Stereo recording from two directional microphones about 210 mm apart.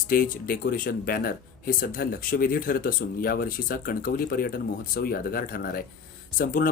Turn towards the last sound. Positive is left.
turn(degrees=40)  # may be behind; listen again after turning